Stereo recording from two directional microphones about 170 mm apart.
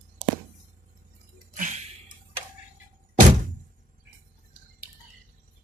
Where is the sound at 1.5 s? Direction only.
45° right (ahead or behind).